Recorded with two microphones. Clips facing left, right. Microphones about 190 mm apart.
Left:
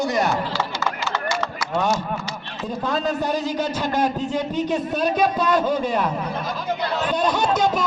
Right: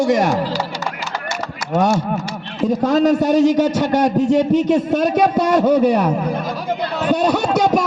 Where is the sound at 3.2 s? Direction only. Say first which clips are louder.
Right 10 dB; 90° right.